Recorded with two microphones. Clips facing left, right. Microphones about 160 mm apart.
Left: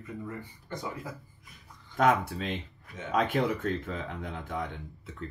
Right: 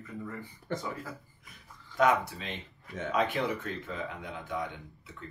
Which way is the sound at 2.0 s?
50° left (ahead or behind).